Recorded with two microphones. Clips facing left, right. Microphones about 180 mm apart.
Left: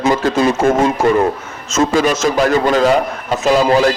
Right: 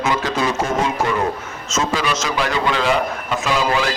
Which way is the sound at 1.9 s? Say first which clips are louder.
Left 9 dB; 50° left (ahead or behind).